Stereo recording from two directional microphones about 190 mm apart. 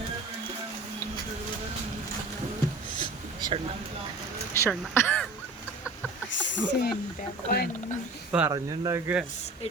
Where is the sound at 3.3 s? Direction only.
20° right (ahead or behind).